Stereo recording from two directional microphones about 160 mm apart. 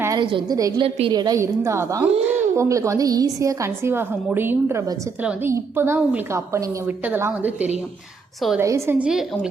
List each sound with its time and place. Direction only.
0.2 s a woman's voice: 30° right (ahead or behind)
2.0 s speech: 40° right (ahead or behind)
2.6 s a woman's voice: 20° right (ahead or behind)
9.0 s a woman's voice: 5° right (ahead or behind)